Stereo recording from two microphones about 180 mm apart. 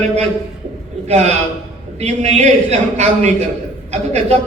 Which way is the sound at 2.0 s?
40° right (ahead or behind).